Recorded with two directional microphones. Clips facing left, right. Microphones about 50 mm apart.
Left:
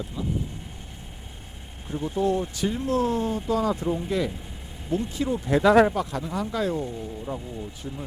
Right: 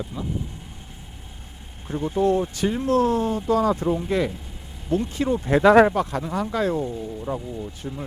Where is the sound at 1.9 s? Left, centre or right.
Right.